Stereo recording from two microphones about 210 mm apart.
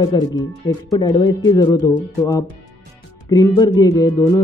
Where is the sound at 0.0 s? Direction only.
20° left (ahead or behind).